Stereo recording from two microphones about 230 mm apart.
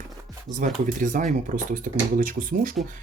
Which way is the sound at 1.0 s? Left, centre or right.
Right.